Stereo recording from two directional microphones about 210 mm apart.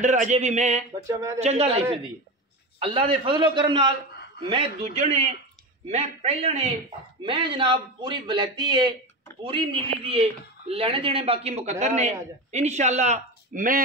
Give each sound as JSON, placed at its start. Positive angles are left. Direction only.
{"t": 0.0, "sound": "speech", "side_deg": -35}
{"t": 1.0, "sound": "speech", "side_deg": -15}
{"t": 1.4, "sound": "a man's voice", "side_deg": -30}